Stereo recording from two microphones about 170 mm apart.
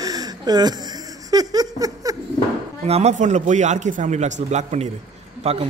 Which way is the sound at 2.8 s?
40° right (ahead or behind).